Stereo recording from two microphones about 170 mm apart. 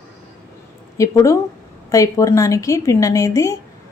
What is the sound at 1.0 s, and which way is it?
A woman's voice, 20° left (ahead or behind).